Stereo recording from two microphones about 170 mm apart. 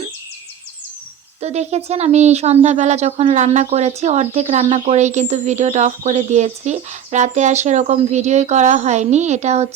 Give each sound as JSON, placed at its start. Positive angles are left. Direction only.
{"t": 1.4, "sound": "speech", "side_deg": -40}